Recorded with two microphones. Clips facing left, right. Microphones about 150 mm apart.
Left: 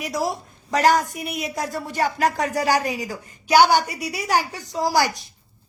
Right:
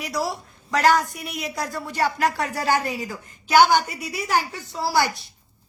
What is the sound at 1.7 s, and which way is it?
Music, 45° left (ahead or behind).